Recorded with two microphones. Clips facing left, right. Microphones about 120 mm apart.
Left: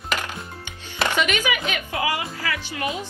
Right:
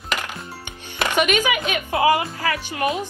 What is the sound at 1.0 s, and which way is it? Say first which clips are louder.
Speech: right 3 dB; 15° right (ahead or behind).